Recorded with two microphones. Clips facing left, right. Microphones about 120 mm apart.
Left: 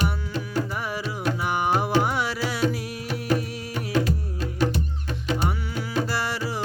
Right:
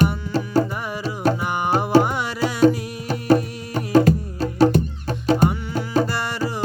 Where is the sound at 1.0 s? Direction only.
35° right (ahead or behind).